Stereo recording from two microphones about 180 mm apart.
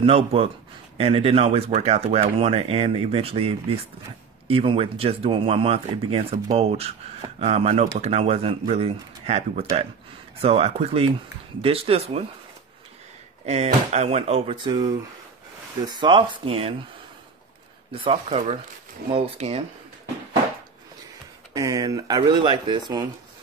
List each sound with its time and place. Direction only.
0.0 s speech: 30° right (ahead or behind)
13.7 s speech: 40° right (ahead or behind)
17.9 s speech: 30° right (ahead or behind)
21.5 s speech: 20° right (ahead or behind)